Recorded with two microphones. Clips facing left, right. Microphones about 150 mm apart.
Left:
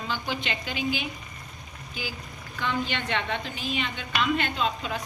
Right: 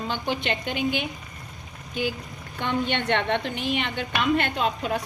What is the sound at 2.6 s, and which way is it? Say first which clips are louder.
A woman's voice: right 4 dB; 50° right (ahead or behind).